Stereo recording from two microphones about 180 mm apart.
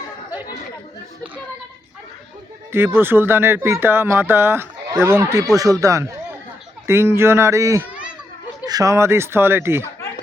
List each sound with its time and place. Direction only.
2.7 s speech: 10° right (ahead or behind)